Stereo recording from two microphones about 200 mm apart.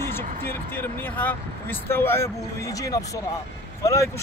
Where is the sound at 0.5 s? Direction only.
10° left (ahead or behind).